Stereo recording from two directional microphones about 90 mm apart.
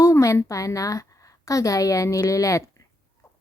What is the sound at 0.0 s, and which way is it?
A woman's voice, 35° left (ahead or behind).